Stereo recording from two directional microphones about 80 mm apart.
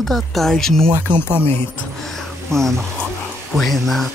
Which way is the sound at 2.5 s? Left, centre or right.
Centre.